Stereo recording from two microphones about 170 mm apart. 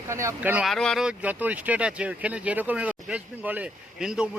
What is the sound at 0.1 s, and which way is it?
Speech, 15° right (ahead or behind).